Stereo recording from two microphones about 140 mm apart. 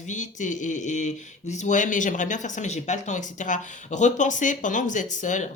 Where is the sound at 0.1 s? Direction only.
60° left (ahead or behind).